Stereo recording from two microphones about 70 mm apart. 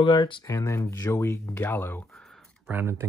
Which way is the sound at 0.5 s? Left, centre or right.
Left.